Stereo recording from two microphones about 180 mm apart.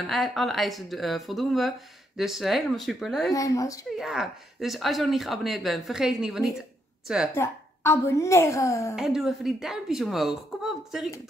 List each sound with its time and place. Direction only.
0.0 s speech: centre (ahead or behind)
3.3 s speech: 20° left (ahead or behind)
4.0 s speech: centre (ahead or behind)
7.3 s a woman's voice: 15° left (ahead or behind)
8.9 s speech: centre (ahead or behind)